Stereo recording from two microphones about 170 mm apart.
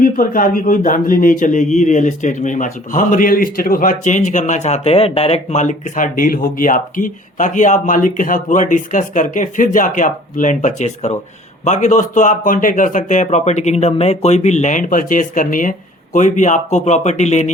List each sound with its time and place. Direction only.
0.0 s speech: 55° left (ahead or behind)